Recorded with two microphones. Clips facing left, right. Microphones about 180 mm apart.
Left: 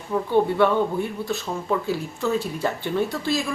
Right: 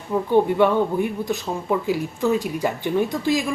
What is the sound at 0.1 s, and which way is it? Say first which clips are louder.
Speech: right 2 dB; 15° right (ahead or behind).